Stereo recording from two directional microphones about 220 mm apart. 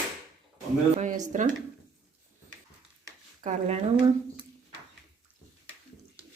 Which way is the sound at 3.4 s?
30° right (ahead or behind).